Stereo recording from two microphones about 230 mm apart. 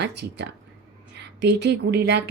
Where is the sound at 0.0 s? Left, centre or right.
Right.